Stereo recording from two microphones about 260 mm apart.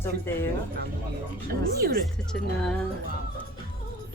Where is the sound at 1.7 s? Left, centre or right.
Right.